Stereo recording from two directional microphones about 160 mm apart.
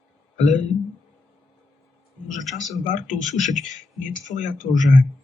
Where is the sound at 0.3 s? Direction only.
50° left (ahead or behind).